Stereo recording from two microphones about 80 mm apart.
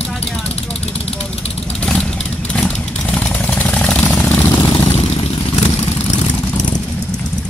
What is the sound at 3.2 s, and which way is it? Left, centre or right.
Vehicle, centre.